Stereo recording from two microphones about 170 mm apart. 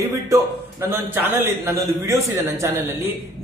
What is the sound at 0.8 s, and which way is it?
A man's voice, 15° right (ahead or behind).